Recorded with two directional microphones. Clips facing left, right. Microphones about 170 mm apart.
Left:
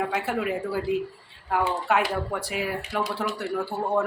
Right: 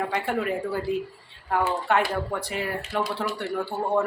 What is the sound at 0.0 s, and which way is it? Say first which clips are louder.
Speech: even; 5° left (ahead or behind).